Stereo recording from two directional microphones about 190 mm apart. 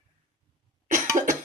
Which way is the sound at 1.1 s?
45° right (ahead or behind).